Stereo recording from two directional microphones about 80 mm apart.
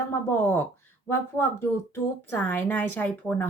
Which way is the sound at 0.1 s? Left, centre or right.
Left.